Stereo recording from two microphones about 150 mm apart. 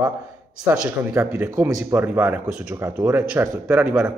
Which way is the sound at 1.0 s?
20° right (ahead or behind).